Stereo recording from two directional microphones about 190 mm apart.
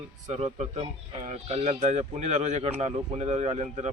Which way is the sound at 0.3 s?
35° right (ahead or behind).